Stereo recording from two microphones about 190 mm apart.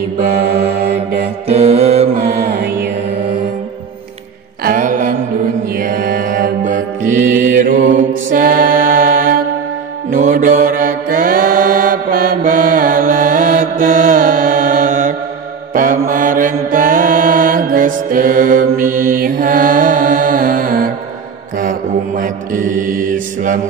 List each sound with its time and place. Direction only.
1.5 s music: 35° right (ahead or behind)
2.2 s music: 55° right (ahead or behind)
4.6 s a sound: 45° right (ahead or behind)
5.8 s mantra: 45° right (ahead or behind)